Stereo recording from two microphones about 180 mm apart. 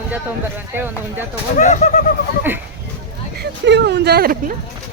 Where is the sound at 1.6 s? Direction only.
45° left (ahead or behind).